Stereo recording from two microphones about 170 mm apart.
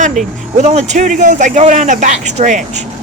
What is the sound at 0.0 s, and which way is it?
Speech, 45° right (ahead or behind).